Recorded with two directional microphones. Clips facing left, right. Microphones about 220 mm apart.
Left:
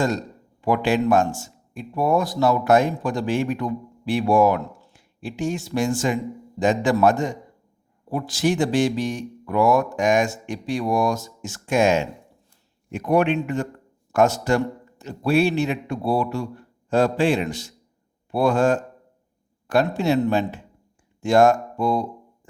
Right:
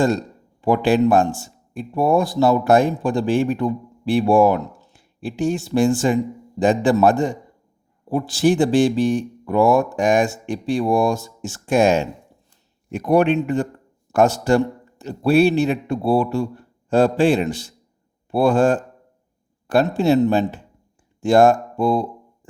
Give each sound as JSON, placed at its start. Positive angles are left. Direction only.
{"t": 0.6, "sound": "a man's voice", "side_deg": -30}
{"t": 21.2, "sound": "speech", "side_deg": -30}